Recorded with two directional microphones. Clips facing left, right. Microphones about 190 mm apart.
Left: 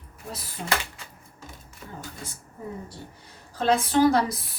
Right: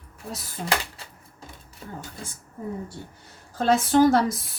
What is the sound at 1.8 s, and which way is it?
Speech, 30° right (ahead or behind).